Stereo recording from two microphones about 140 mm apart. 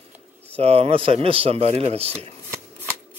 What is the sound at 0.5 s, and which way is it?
A man's voice, 45° right (ahead or behind).